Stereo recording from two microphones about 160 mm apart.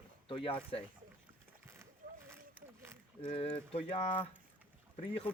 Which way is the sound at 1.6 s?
15° right (ahead or behind).